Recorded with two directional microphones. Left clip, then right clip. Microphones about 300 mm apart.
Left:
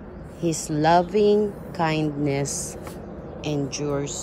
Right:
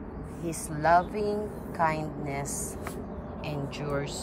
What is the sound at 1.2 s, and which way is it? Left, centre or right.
Speech, left.